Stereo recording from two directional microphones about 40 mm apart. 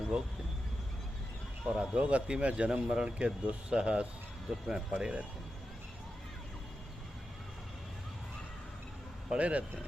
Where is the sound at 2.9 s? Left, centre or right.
Right.